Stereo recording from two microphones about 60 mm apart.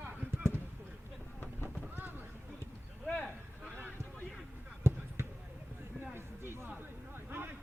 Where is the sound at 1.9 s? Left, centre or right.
Right.